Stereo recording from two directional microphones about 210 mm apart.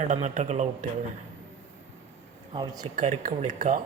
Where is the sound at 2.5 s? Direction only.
20° right (ahead or behind).